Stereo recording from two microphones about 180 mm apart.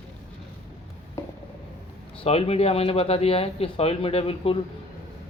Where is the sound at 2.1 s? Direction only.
35° left (ahead or behind).